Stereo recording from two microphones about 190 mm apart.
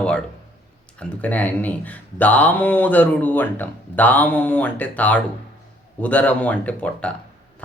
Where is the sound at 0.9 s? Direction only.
5° left (ahead or behind).